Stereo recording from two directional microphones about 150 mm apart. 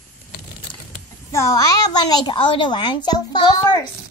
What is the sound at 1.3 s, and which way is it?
A child's voice, 20° left (ahead or behind).